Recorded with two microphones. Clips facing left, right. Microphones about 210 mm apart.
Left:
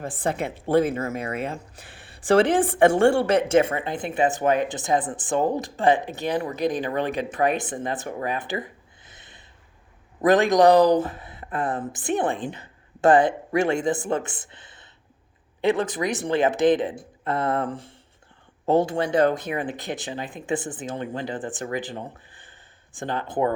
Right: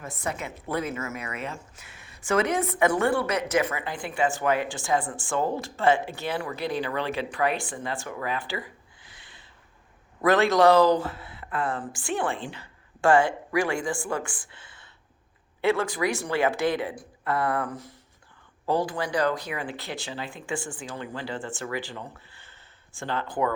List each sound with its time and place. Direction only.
0.0 s a woman's voice: 30° left (ahead or behind)